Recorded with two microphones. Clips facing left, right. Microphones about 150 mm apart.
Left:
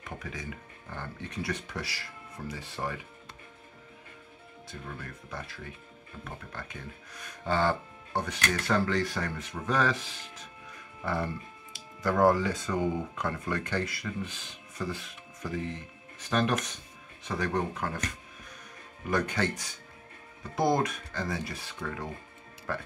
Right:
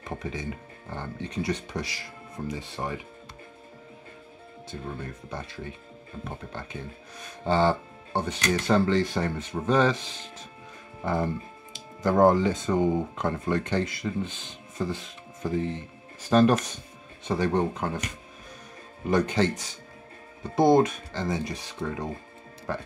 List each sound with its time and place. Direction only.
0.0 s speech: 25° right (ahead or behind)
4.6 s speech: 25° right (ahead or behind)